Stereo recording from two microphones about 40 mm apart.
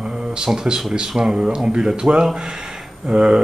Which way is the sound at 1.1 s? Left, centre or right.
Centre.